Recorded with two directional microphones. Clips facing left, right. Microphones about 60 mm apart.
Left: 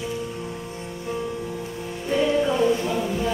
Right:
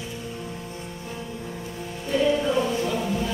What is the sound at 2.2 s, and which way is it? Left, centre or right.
Choir, centre.